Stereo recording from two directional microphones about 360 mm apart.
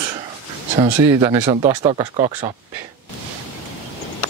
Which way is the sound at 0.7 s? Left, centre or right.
Centre.